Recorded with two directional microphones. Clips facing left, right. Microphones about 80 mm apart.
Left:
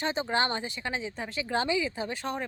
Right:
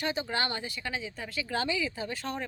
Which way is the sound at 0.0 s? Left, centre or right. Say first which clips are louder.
Left 3 dB; left.